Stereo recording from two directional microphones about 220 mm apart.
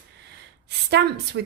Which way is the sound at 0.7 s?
50° right (ahead or behind).